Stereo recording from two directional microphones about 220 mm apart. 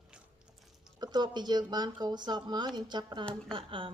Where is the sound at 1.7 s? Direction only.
20° right (ahead or behind).